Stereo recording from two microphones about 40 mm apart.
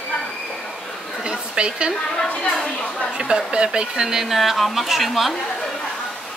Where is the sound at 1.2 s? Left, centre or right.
Right.